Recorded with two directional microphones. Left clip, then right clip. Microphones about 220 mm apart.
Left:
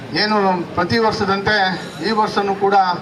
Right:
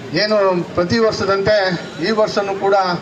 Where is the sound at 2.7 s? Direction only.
20° left (ahead or behind).